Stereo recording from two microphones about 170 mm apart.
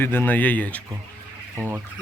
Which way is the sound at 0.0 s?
15° left (ahead or behind).